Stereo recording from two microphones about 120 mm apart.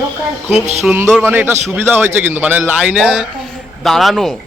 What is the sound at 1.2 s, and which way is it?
A man's voice, 15° right (ahead or behind).